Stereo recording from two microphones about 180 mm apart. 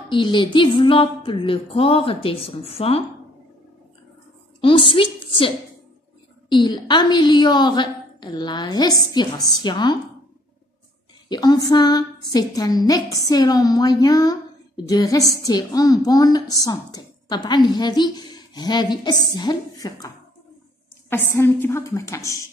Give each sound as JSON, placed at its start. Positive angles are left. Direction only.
{"t": 0.1, "sound": "a sound", "side_deg": 25}
{"t": 4.6, "sound": "a woman's voice", "side_deg": 30}
{"t": 6.5, "sound": "a woman's voice", "side_deg": 25}
{"t": 11.2, "sound": "a woman's voice", "side_deg": 20}
{"t": 21.1, "sound": "a woman's voice", "side_deg": 15}